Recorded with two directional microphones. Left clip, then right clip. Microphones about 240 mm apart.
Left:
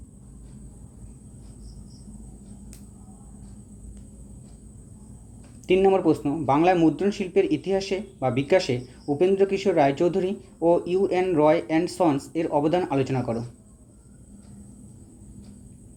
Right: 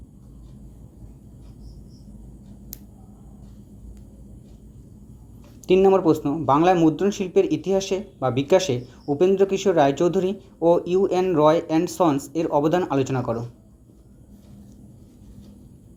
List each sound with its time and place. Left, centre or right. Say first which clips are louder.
5.6 s speech: right 3 dB; centre